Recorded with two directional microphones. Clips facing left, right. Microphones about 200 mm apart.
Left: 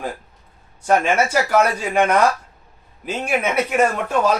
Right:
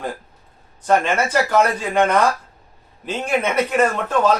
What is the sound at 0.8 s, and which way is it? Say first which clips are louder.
Speech: left 1 dB; 10° left (ahead or behind).